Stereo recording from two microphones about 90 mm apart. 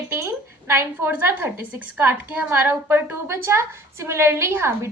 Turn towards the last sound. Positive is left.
turn(degrees=-30)  # may be behind; listen again after turning